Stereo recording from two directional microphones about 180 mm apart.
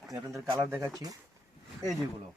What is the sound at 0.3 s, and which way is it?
Speech, 15° right (ahead or behind).